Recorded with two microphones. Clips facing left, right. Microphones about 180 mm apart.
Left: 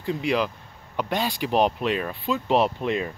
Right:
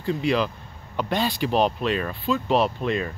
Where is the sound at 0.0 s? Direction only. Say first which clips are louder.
Right 1 dB; 15° left (ahead or behind).